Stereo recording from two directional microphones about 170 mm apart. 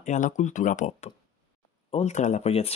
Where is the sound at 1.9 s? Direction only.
40° left (ahead or behind).